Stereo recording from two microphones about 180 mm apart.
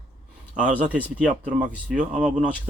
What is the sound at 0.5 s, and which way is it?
Speech, 5° right (ahead or behind).